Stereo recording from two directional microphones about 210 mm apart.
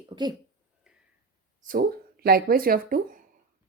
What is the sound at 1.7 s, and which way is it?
Speech, 45° right (ahead or behind).